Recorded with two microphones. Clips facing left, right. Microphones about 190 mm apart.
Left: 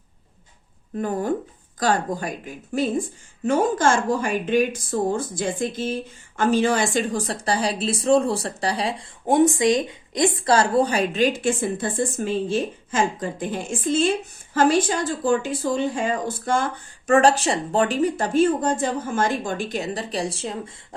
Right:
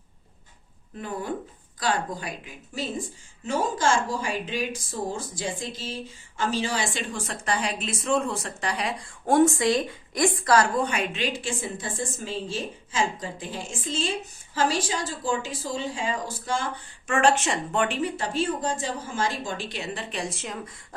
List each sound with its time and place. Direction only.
0.9 s speech: 45° left (ahead or behind)
9.2 s speech: 20° left (ahead or behind); by 16.6 s 55° left (ahead or behind)
17.1 s speech: 35° left (ahead or behind)